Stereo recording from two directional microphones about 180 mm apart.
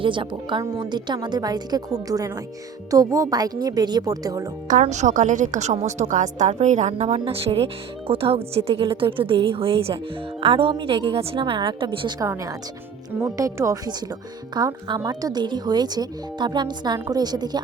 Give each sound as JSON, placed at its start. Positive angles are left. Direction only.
{"t": 0.0, "sound": "speech", "side_deg": -30}
{"t": 4.7, "sound": "a woman's voice", "side_deg": -40}